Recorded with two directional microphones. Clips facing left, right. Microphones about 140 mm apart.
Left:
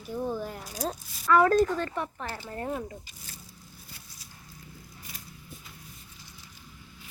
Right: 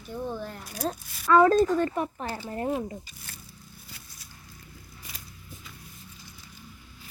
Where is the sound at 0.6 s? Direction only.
60° right (ahead or behind).